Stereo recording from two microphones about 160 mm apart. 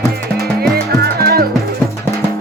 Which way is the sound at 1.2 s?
75° right (ahead or behind).